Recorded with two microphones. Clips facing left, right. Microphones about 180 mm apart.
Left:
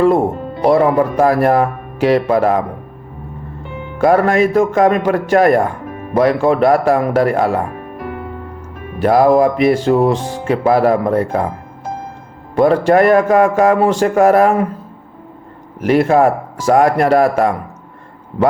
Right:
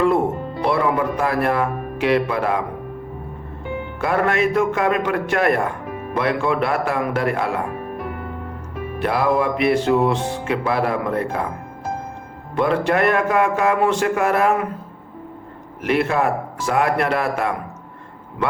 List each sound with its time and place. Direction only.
0.6 s music: 40° left (ahead or behind)
4.0 s music: 40° left (ahead or behind)
9.0 s music: 40° left (ahead or behind)
12.5 s music: 40° left (ahead or behind)
15.8 s music: 40° left (ahead or behind)